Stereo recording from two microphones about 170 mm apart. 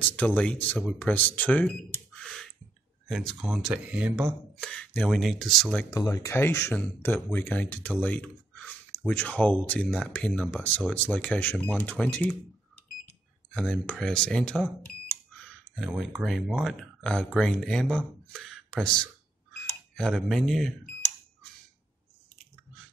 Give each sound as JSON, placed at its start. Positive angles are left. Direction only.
{"t": 0.0, "sound": "speech", "side_deg": 10}
{"t": 4.6, "sound": "speech", "side_deg": 5}
{"t": 5.9, "sound": "speech", "side_deg": 20}
{"t": 13.6, "sound": "speech", "side_deg": 5}
{"t": 15.8, "sound": "speech", "side_deg": -5}